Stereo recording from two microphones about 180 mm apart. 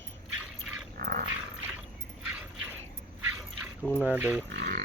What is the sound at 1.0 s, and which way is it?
Dog, 55° right (ahead or behind).